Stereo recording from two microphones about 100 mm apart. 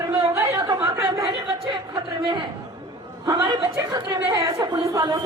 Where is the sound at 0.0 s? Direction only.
30° right (ahead or behind).